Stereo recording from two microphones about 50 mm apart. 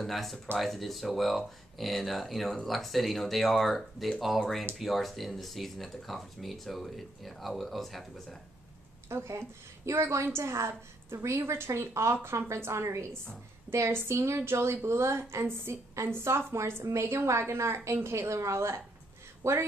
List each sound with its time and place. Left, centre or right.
0.0 s speech: centre
9.1 s a woman's voice: right
10.2 s a woman's voice: right
11.4 s a woman's voice: right